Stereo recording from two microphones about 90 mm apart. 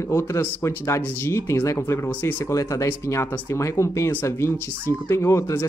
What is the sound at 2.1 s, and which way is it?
Speech, 20° left (ahead or behind).